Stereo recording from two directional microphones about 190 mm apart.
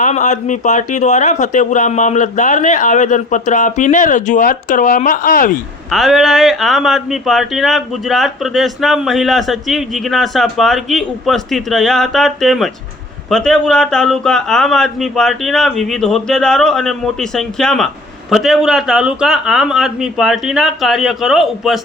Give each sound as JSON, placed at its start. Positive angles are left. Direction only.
{"t": 0.0, "sound": "a man's voice", "side_deg": 40}
{"t": 5.9, "sound": "speech", "side_deg": 0}